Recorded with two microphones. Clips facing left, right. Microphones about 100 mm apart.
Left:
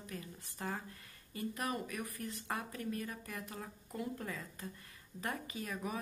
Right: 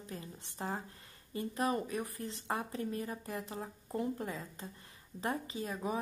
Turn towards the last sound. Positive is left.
turn(degrees=-25)  # may be behind; listen again after turning